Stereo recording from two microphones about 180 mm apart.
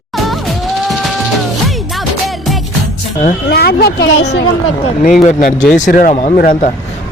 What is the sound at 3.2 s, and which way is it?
Speech, 55° left (ahead or behind).